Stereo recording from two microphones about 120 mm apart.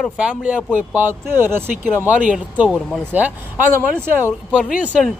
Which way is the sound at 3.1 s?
15° right (ahead or behind).